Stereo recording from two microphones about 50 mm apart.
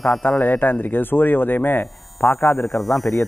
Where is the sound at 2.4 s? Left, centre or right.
Left.